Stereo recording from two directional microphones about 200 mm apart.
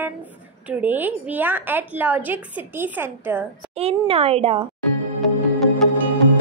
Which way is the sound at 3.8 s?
30° right (ahead or behind).